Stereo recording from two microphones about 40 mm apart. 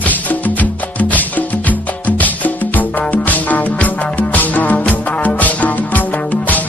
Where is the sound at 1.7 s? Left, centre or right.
Left.